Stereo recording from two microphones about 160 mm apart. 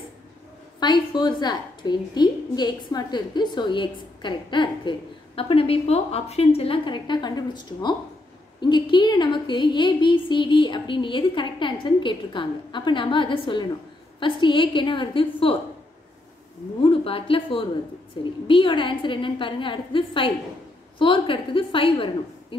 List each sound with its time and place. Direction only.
0.7 s a woman's voice: 25° left (ahead or behind)
16.8 s a woman's voice: 35° left (ahead or behind)